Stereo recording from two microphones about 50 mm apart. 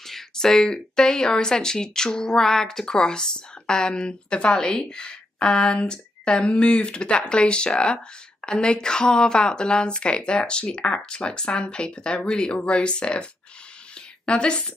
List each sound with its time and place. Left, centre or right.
0.0 s speech: centre